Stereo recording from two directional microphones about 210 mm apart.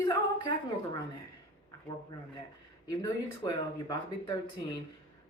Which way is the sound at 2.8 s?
15° left (ahead or behind).